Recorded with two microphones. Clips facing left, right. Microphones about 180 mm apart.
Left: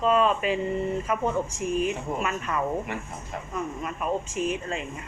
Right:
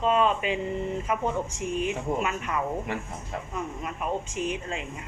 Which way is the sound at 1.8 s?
20° right (ahead or behind).